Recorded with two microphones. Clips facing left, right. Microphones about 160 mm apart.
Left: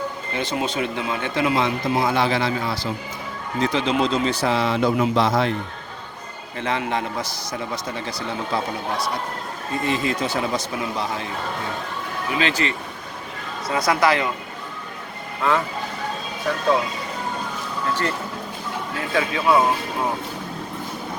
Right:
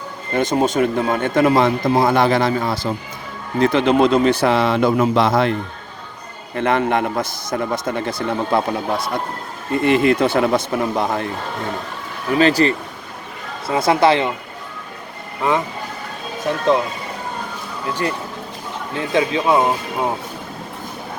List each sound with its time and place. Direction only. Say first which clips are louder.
0.3 s a man's voice: right 8 dB; 45° right (ahead or behind)
6.6 s a man's voice: right 7 dB; 55° right (ahead or behind)
12.3 s speech: right 9 dB; 40° right (ahead or behind)
13.7 s speech: right 5 dB; 25° right (ahead or behind)
15.4 s speech: right 2 dB; 20° right (ahead or behind)
18.9 s speech: right 6 dB; 20° right (ahead or behind)